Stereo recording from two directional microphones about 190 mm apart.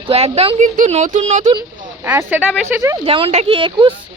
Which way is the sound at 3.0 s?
30° right (ahead or behind).